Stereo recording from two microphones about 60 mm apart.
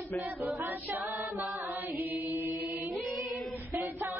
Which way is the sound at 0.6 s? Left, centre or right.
Right.